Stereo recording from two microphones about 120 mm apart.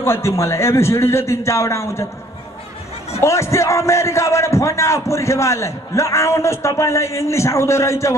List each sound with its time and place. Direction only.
0.0 s a man's voice: 20° left (ahead or behind)
3.2 s a man's voice: 25° left (ahead or behind)